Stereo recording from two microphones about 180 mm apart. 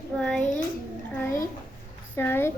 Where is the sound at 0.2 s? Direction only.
5° left (ahead or behind).